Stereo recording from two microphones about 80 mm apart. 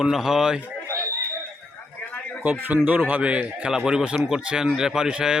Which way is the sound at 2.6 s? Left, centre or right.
Centre.